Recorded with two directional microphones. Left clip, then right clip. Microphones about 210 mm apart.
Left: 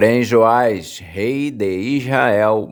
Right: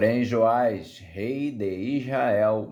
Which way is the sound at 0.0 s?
50° left (ahead or behind).